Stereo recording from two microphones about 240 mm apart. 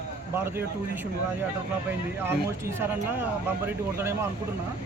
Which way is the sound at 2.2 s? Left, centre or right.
Centre.